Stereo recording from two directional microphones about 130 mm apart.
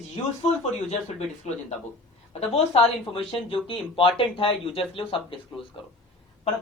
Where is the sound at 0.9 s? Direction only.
60° left (ahead or behind).